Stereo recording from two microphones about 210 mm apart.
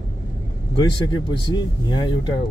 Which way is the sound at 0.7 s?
20° left (ahead or behind).